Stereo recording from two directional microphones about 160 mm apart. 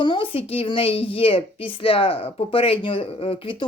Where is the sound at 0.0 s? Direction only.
30° left (ahead or behind).